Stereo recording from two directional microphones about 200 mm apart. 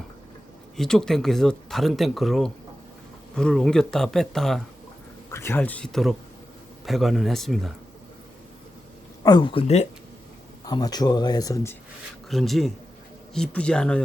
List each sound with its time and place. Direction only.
0.8 s speech: centre (ahead or behind)
5.3 s speech: 10° left (ahead or behind)
9.2 s speech: 25° left (ahead or behind)
10.7 s speech: 20° left (ahead or behind)
12.3 s speech: centre (ahead or behind)